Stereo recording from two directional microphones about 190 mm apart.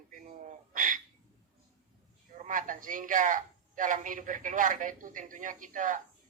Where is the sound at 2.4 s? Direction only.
45° right (ahead or behind).